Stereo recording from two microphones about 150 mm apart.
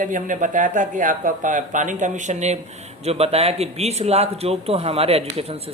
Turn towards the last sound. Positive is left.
turn(degrees=-40)  # may be behind; listen again after turning